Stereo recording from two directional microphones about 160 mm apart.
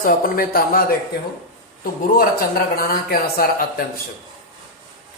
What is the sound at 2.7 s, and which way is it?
Speech, 65° left (ahead or behind).